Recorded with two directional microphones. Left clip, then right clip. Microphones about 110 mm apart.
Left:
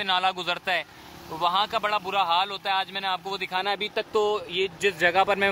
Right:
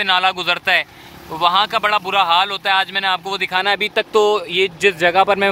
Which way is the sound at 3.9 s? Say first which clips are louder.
Right 9 dB; 10° right (ahead or behind).